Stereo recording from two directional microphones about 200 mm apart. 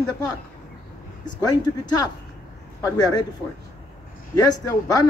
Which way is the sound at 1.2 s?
20° left (ahead or behind).